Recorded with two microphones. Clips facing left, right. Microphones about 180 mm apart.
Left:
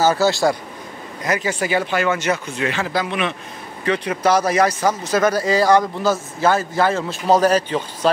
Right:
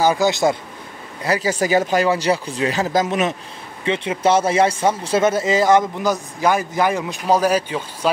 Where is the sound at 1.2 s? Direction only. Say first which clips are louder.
Right 2 dB; 35° right (ahead or behind).